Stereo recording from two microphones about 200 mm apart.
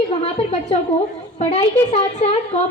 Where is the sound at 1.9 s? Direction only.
35° left (ahead or behind).